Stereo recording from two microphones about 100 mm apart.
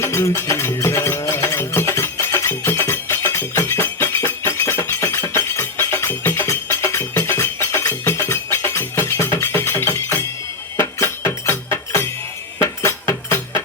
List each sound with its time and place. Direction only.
0.0 s music: 25° left (ahead or behind)